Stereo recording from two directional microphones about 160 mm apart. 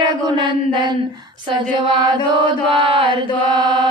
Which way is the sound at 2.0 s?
30° right (ahead or behind).